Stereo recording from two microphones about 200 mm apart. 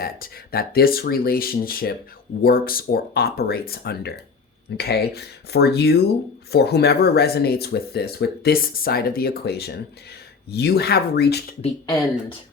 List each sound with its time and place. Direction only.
0.0 s speech: 50° left (ahead or behind)